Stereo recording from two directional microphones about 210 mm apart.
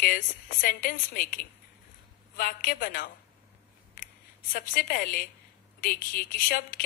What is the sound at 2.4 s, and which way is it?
Speech, 45° left (ahead or behind).